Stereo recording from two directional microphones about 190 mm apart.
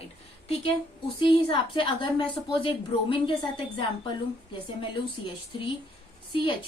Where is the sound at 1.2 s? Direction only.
30° left (ahead or behind).